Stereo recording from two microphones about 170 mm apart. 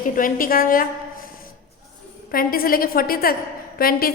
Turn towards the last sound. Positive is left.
turn(degrees=60)  # may be behind; listen again after turning